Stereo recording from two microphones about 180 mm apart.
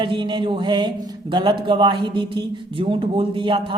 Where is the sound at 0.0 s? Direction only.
25° right (ahead or behind).